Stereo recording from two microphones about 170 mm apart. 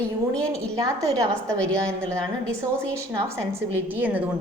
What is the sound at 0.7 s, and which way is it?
Speech, 20° right (ahead or behind).